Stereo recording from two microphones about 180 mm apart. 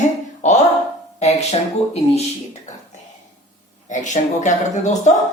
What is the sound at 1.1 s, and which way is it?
Speech, 35° left (ahead or behind).